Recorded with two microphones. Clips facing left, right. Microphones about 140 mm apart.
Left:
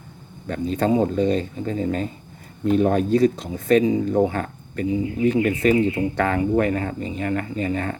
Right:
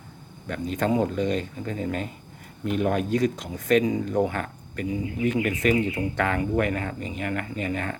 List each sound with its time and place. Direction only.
0.4 s speech: 35° left (ahead or behind)